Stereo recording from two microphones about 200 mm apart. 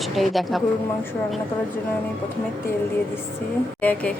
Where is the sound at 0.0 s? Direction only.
Centre (ahead or behind).